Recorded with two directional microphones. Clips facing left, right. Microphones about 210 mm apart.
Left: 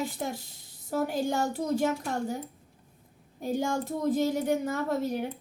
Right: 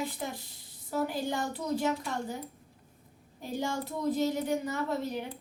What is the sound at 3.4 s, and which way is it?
A woman's voice, 45° left (ahead or behind).